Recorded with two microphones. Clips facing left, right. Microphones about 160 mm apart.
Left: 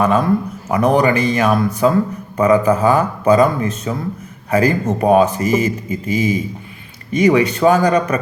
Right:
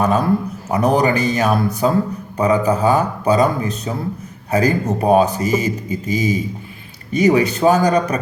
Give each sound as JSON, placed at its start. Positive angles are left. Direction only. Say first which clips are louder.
{"t": 0.0, "sound": "a man's voice", "louder": "left 1 dB", "side_deg": -35}